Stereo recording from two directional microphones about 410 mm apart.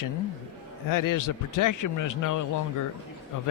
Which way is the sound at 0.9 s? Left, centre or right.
Left.